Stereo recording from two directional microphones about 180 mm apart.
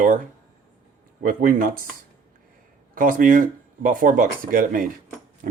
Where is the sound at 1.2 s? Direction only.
50° right (ahead or behind).